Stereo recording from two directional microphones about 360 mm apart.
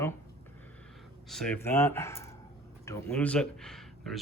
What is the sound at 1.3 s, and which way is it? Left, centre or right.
Speech, centre.